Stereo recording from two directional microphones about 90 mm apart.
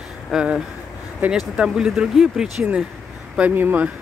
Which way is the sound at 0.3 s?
10° right (ahead or behind).